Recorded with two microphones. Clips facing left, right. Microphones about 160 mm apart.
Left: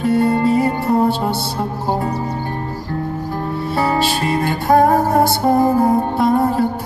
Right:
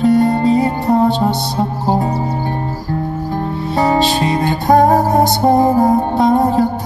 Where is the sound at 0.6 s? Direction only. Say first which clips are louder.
Right 2 dB; 20° right (ahead or behind).